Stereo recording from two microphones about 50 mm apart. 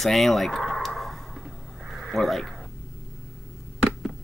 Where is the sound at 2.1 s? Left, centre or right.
Centre.